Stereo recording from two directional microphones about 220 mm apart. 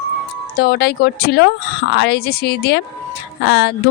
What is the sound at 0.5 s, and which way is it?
A woman's voice, 45° left (ahead or behind).